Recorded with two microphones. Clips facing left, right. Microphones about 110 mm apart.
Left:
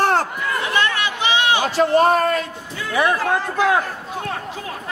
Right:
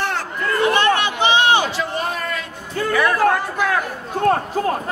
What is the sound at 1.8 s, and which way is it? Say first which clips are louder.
Speech: left 9 dB; 50° left (ahead or behind).